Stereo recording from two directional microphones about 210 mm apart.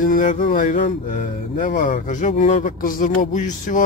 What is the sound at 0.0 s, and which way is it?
Speech, 40° left (ahead or behind).